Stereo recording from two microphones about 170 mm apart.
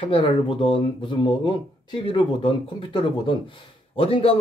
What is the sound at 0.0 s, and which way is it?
Speech, 30° left (ahead or behind).